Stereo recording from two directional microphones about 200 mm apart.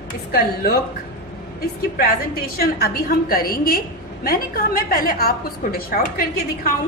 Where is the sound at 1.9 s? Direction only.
50° left (ahead or behind).